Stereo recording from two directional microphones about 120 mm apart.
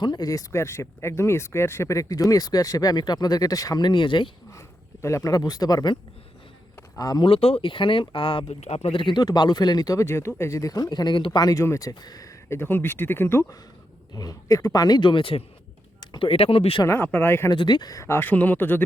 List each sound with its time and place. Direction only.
0.0 s speech: 35° left (ahead or behind)
5.0 s speech: 25° left (ahead or behind)
7.3 s speech: 55° left (ahead or behind)
8.4 s speech: 65° left (ahead or behind); by 13.6 s 20° left (ahead or behind)
14.1 s speech: 30° left (ahead or behind); by 16.8 s 50° left (ahead or behind)
16.8 s speech: 15° left (ahead or behind)
17.5 s speech: 35° left (ahead or behind); by 18.8 s 15° left (ahead or behind)